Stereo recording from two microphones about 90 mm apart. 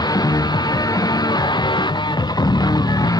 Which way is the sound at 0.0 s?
45° left (ahead or behind).